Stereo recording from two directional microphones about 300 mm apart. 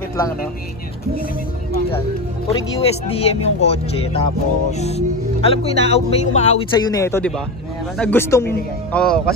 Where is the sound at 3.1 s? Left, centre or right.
Centre.